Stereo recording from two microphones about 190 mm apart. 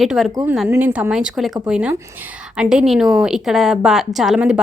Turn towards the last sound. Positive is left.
turn(degrees=-5)  # may be behind; listen again after turning